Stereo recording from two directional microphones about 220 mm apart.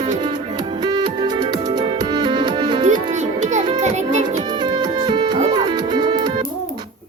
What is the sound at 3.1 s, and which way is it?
Music, 30° right (ahead or behind).